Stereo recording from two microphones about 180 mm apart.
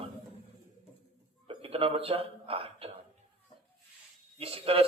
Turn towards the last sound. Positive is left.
turn(degrees=-30)  # may be behind; listen again after turning